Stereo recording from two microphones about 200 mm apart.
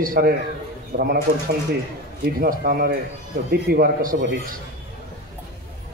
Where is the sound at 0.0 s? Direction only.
45° right (ahead or behind).